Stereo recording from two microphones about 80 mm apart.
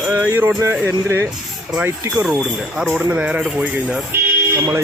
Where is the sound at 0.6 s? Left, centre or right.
Right.